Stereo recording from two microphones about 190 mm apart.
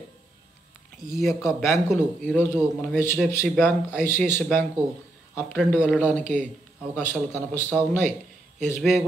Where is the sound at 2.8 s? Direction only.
15° left (ahead or behind).